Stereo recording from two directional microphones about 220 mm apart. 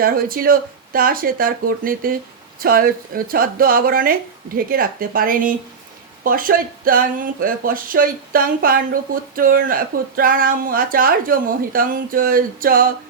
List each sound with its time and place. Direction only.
0.0 s speech: 40° right (ahead or behind)